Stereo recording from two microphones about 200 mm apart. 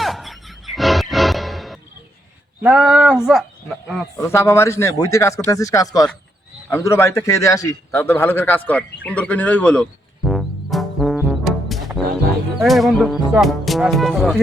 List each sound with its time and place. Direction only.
0.0 s music: centre (ahead or behind)
2.6 s speech: 5° right (ahead or behind)
4.2 s a man's voice: 15° left (ahead or behind)
10.2 s music: centre (ahead or behind)
12.5 s speech: centre (ahead or behind)